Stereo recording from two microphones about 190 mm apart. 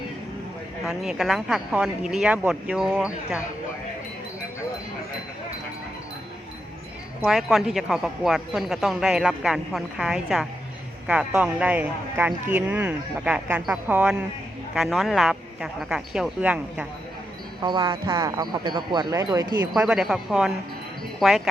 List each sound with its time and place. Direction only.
0.9 s a woman's voice: centre (ahead or behind)
7.3 s a woman's voice: centre (ahead or behind)
17.6 s speech: 25° right (ahead or behind)
19.7 s a woman's voice: 5° right (ahead or behind)